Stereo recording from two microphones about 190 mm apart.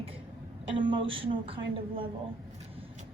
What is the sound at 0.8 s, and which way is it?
Speech, 25° right (ahead or behind).